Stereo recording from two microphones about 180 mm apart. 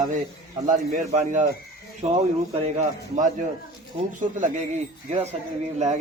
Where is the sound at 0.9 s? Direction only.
40° right (ahead or behind).